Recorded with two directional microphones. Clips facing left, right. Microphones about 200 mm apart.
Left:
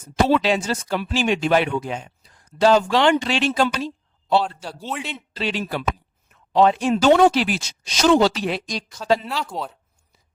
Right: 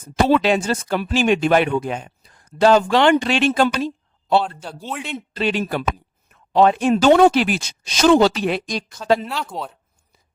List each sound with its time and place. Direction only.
0.3 s speech: 55° right (ahead or behind)
4.9 s speech: centre (ahead or behind)
5.1 s speech: 55° right (ahead or behind)
9.2 s speech: centre (ahead or behind)